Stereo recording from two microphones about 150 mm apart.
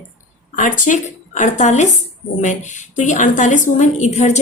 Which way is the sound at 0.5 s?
60° left (ahead or behind).